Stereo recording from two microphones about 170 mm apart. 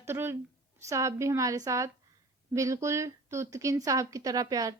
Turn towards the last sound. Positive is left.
turn(degrees=-20)  # may be behind; listen again after turning